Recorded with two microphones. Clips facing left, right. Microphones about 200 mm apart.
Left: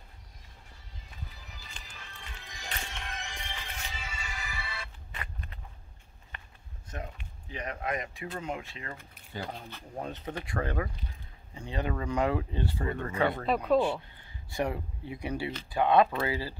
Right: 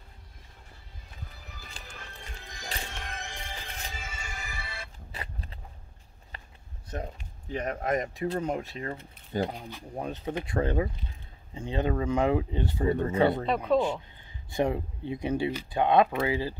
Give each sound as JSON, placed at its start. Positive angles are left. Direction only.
{"t": 2.6, "sound": "music", "side_deg": -40}
{"t": 5.2, "sound": "a sound", "side_deg": -30}
{"t": 6.9, "sound": "speech", "side_deg": -40}
{"t": 9.5, "sound": "speech", "side_deg": -15}
{"t": 13.7, "sound": "speech", "side_deg": 0}
{"t": 14.1, "sound": "speech", "side_deg": -20}